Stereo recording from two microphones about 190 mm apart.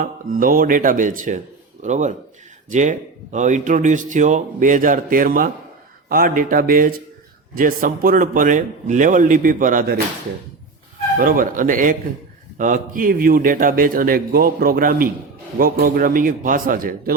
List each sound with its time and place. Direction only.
0.0 s a man's voice: 45° right (ahead or behind)
11.2 s a man's voice: 45° right (ahead or behind)